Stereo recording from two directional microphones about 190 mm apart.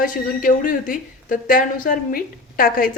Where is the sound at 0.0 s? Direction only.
45° left (ahead or behind).